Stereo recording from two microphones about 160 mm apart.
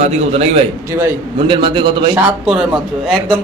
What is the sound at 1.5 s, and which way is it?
Speech, 30° right (ahead or behind).